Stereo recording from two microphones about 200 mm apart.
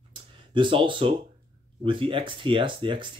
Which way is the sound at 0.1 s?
25° right (ahead or behind).